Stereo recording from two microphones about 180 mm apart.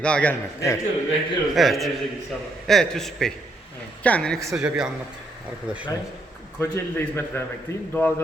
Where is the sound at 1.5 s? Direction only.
Centre (ahead or behind).